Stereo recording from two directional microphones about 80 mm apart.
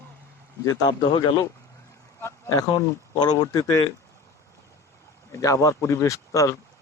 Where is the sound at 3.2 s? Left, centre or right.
Left.